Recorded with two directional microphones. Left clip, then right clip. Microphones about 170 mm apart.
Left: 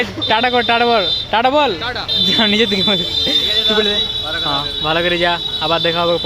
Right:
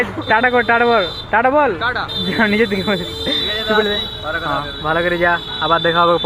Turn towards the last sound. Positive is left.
turn(degrees=0)  # may be behind; listen again after turning